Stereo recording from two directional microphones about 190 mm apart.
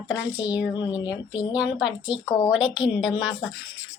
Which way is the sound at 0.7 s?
25° left (ahead or behind).